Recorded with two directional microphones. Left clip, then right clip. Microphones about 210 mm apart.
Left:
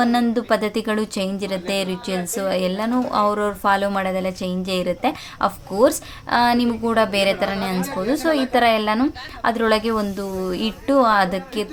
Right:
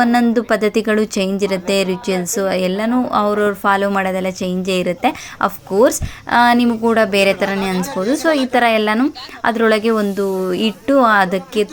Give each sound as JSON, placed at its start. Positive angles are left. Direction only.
{"t": 0.0, "sound": "speech", "side_deg": -15}